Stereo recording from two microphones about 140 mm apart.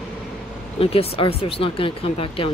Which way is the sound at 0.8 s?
40° left (ahead or behind).